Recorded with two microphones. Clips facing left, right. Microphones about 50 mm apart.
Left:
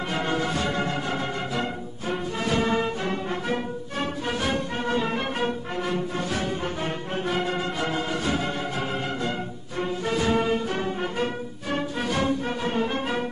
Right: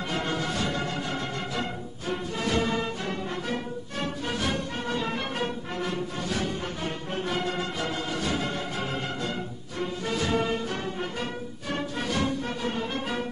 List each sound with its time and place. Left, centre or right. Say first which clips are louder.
0.1 s music: left 3 dB; centre
9.8 s music: left 4 dB; left
11.7 s music: left 3 dB; centre